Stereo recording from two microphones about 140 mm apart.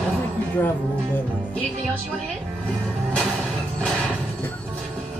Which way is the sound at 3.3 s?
10° right (ahead or behind).